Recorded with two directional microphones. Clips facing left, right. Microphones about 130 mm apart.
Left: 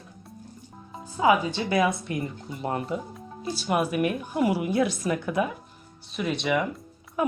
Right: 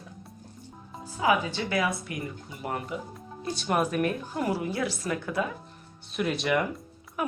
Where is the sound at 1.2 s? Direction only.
25° left (ahead or behind).